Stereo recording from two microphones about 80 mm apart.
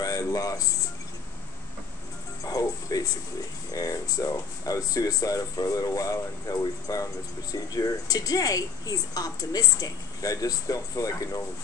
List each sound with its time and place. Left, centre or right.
0.0 s music: left
2.4 s music: left
3.7 s speech: left